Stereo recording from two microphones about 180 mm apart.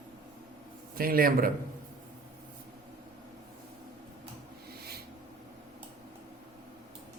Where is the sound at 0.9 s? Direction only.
55° right (ahead or behind).